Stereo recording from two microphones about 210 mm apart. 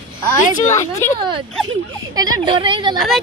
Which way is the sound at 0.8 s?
15° left (ahead or behind).